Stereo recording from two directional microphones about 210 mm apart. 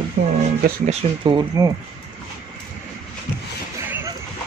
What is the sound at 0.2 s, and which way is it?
Speech, 45° right (ahead or behind).